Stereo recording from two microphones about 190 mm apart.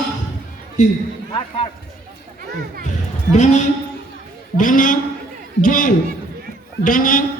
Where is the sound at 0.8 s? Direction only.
40° left (ahead or behind).